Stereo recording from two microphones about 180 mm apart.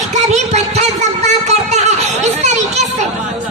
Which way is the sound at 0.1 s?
40° right (ahead or behind).